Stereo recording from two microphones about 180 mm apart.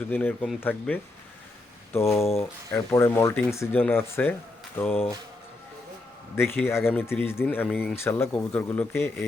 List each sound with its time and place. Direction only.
0.1 s speech: 10° left (ahead or behind)
2.4 s speech: 15° left (ahead or behind)
6.3 s speech: 15° left (ahead or behind)